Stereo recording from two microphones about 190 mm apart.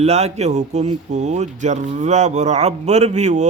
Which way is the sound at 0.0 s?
35° right (ahead or behind).